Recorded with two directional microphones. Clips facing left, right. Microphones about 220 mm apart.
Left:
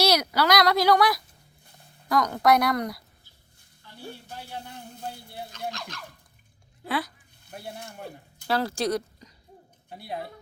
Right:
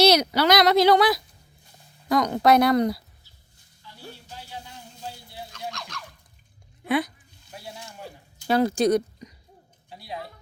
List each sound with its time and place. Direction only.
0.0 s a woman's voice: 20° right (ahead or behind)
3.8 s a sound: 55° left (ahead or behind)
6.8 s speech: 20° right (ahead or behind)
7.4 s a sound: 55° left (ahead or behind)
8.4 s speech: 20° right (ahead or behind)
9.9 s speech: 55° left (ahead or behind)